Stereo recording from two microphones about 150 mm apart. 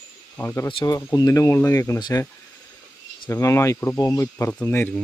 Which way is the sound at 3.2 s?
20° left (ahead or behind).